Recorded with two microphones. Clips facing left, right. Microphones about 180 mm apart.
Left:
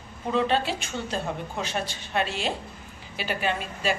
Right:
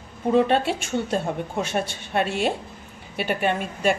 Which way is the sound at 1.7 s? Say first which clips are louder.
Right 4 dB; 55° right (ahead or behind).